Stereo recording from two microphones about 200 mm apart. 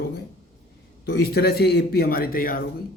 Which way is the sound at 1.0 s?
55° left (ahead or behind).